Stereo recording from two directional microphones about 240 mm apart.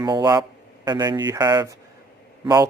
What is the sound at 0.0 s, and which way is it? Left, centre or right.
Speech, centre.